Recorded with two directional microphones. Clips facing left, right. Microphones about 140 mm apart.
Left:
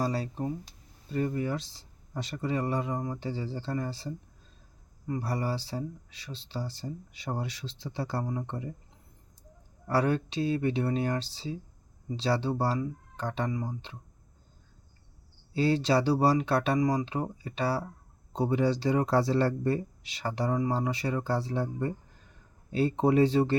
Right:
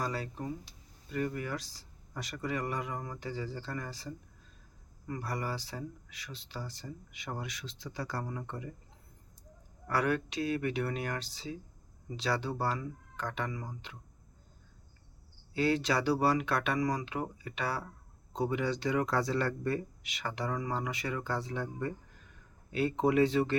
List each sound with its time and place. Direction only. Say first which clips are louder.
0.0 s speech: left 5 dB; 30° left (ahead or behind)
9.8 s speech: left 4 dB; 30° left (ahead or behind)
15.5 s speech: left 4 dB; 30° left (ahead or behind)